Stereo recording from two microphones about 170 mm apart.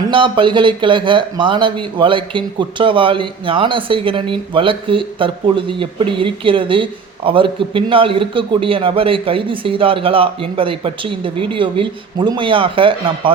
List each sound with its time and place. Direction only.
0.1 s a man's voice: 30° right (ahead or behind)